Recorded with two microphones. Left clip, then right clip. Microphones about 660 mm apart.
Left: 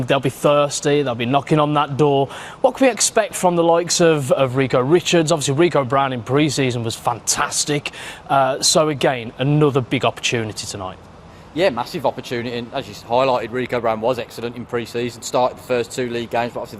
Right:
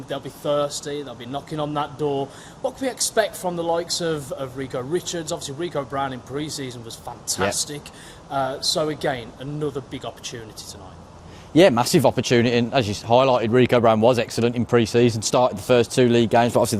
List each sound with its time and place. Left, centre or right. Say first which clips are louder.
0.1 s speech: left 8 dB; left
11.5 s speech: right 4 dB; right